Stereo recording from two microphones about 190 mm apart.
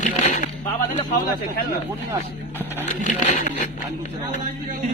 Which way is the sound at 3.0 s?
40° left (ahead or behind).